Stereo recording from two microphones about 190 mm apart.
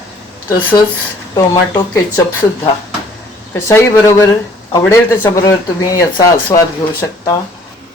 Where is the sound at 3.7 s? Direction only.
15° left (ahead or behind).